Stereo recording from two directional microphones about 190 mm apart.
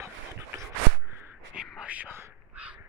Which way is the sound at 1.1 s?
15° right (ahead or behind).